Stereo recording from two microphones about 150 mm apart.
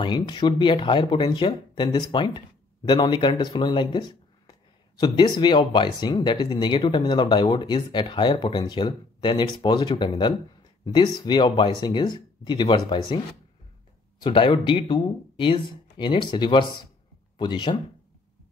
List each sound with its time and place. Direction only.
0.0 s speech: 30° left (ahead or behind)
14.2 s speech: 35° left (ahead or behind)